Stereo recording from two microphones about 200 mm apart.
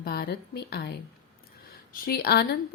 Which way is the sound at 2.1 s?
50° left (ahead or behind).